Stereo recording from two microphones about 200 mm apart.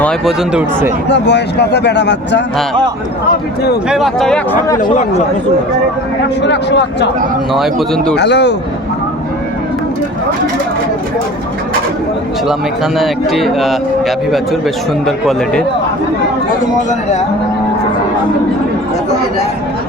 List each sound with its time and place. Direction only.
0.0 s speech: centre (ahead or behind)
1.0 s speech: 60° left (ahead or behind)
3.8 s speech: centre (ahead or behind)
6.4 s speech: 60° left (ahead or behind)
7.5 s speech: centre (ahead or behind)
8.1 s speech: 55° left (ahead or behind)
13.0 s speech: centre (ahead or behind)
15.0 s speech: centre (ahead or behind)